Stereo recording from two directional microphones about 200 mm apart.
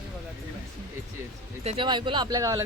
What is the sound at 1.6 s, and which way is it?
Speech, 25° right (ahead or behind).